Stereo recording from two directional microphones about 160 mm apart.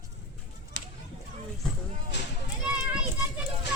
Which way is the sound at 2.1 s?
90° left.